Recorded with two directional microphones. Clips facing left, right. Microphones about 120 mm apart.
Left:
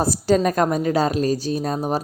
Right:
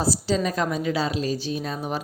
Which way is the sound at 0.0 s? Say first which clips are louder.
Left 5 dB; 55° left (ahead or behind).